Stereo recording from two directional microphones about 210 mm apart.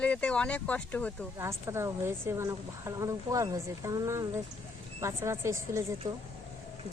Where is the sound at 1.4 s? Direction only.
15° right (ahead or behind).